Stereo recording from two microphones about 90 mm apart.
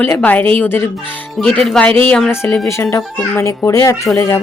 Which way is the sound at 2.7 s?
30° left (ahead or behind).